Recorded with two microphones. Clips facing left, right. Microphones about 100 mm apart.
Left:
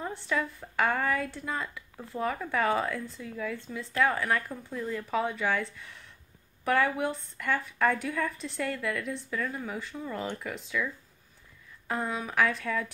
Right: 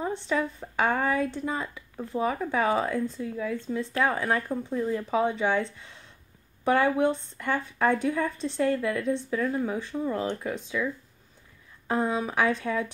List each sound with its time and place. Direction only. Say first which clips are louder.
0.0 s speech: right 4 dB; 20° right (ahead or behind)
11.9 s speech: right 5 dB; 25° right (ahead or behind)